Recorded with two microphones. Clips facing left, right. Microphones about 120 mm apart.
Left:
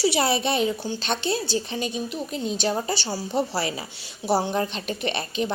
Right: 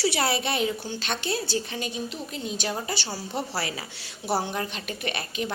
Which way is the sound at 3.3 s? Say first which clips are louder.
Left 6 dB; 20° left (ahead or behind).